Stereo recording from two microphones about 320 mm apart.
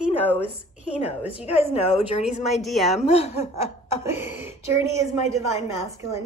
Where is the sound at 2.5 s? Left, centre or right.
Centre.